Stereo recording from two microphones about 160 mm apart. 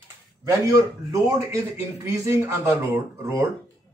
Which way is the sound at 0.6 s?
20° right (ahead or behind).